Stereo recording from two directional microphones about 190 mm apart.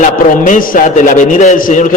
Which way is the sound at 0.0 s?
45° left (ahead or behind).